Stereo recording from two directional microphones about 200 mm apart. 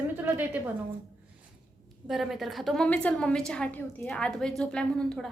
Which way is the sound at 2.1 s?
Centre (ahead or behind).